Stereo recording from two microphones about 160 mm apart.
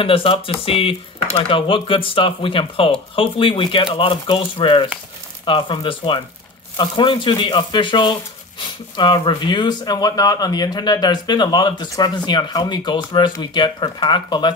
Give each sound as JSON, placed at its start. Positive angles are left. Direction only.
{"t": 0.0, "sound": "speech", "side_deg": 35}